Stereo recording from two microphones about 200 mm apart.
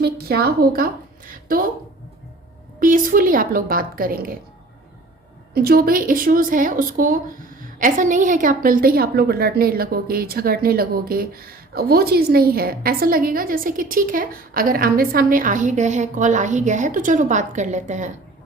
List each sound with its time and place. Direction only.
0.0 s a woman's voice: 50° right (ahead or behind)
2.8 s a woman's voice: 45° right (ahead or behind)
5.5 s a woman's voice: 50° right (ahead or behind)